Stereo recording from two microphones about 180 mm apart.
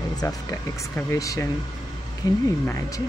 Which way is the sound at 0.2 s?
20° left (ahead or behind).